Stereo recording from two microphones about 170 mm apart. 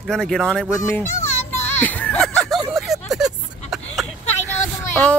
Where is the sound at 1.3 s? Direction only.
40° left (ahead or behind).